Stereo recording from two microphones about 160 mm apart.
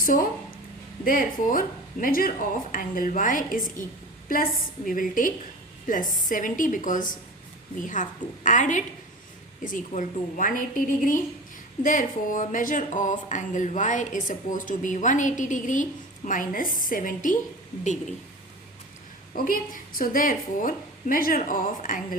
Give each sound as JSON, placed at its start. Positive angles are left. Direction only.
{"t": 0.0, "sound": "a woman's voice", "side_deg": 55}
{"t": 19.3, "sound": "a woman's voice", "side_deg": 60}